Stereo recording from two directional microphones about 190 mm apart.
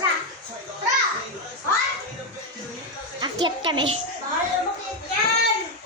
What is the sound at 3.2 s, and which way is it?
Speech, 25° right (ahead or behind).